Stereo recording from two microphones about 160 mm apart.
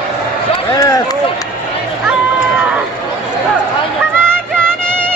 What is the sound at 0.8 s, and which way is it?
Run, 25° left (ahead or behind).